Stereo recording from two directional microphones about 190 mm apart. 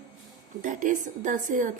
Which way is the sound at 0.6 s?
45° right (ahead or behind).